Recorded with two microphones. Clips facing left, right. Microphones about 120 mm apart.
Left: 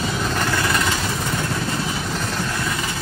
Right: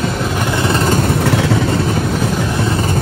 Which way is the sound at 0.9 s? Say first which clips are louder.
Right 10 dB; 60° right (ahead or behind).